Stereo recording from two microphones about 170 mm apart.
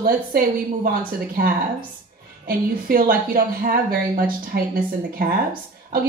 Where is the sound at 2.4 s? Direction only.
60° right (ahead or behind).